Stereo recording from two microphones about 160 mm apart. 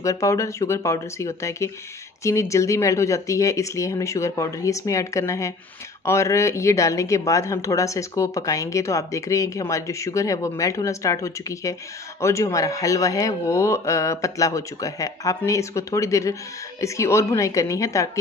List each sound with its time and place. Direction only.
0.0 s speech: 20° left (ahead or behind)